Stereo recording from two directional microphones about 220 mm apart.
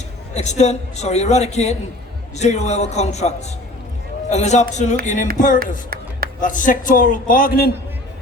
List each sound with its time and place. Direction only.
0.3 s a man's voice: 30° left (ahead or behind)
5.9 s a sound: 40° right (ahead or behind)
6.4 s a man's voice: 35° left (ahead or behind)